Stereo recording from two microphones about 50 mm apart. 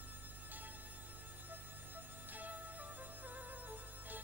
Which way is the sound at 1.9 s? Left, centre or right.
Right.